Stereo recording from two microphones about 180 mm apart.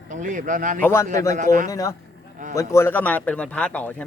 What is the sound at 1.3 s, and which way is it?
Speech, 45° right (ahead or behind).